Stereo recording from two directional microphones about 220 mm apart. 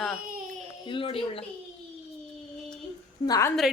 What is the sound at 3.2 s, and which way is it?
Speech, 15° left (ahead or behind).